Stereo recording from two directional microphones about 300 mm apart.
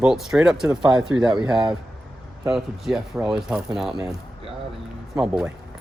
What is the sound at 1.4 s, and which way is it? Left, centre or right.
Speech, centre.